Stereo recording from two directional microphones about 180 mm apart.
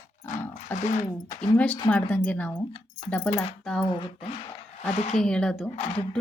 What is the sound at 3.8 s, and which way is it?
Speech, 25° left (ahead or behind).